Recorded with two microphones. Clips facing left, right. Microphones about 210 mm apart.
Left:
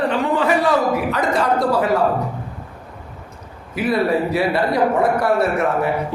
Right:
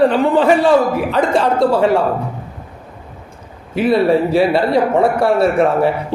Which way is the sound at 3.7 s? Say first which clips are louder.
Right 5 dB; 30° right (ahead or behind).